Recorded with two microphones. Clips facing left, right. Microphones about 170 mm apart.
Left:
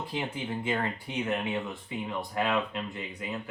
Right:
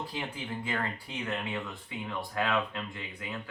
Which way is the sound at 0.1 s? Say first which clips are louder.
Left 4 dB; 25° left (ahead or behind).